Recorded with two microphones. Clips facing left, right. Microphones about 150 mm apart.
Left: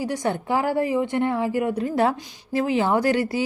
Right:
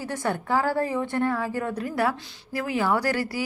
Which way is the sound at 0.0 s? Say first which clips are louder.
Left 3 dB; 15° left (ahead or behind).